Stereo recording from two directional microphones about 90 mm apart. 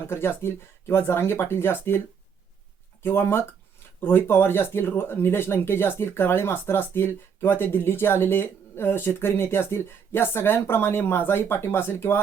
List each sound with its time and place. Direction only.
0.1 s speech: 25° left (ahead or behind)
3.0 s speech: 25° left (ahead or behind)